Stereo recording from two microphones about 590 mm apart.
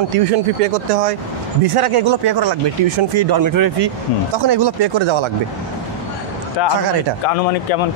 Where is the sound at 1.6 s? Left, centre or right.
Right.